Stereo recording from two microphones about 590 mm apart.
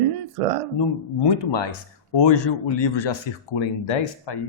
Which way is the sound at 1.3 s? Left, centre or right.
Left.